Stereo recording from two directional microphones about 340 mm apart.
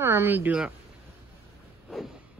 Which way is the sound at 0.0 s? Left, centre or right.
Centre.